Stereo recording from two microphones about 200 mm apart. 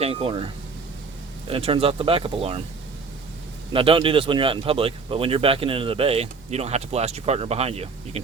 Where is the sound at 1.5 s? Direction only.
30° right (ahead or behind).